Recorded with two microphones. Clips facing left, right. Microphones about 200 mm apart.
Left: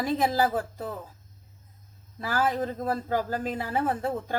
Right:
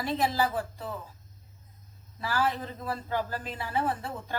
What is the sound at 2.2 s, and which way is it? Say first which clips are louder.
A man's voice: left 3 dB; 50° left (ahead or behind).